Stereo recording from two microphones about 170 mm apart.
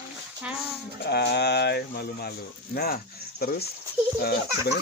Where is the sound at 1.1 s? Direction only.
75° left (ahead or behind).